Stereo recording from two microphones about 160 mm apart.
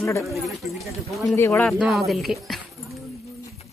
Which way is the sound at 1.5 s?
Centre (ahead or behind).